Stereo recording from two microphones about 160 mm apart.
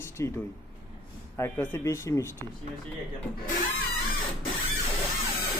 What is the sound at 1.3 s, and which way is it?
Speech, 15° left (ahead or behind).